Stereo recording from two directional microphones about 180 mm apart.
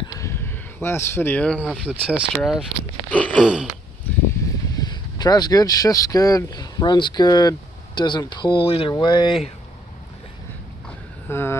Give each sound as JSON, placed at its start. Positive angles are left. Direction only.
{"t": 0.2, "sound": "speech", "side_deg": 15}
{"t": 1.9, "sound": "speech", "side_deg": -5}
{"t": 3.1, "sound": "a sound", "side_deg": 10}
{"t": 3.3, "sound": "speech", "side_deg": -5}
{"t": 4.7, "sound": "speech", "side_deg": 20}
{"t": 11.2, "sound": "a sound", "side_deg": 15}